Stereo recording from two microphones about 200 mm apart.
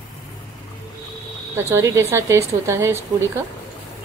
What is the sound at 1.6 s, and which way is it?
A woman's voice, 15° right (ahead or behind).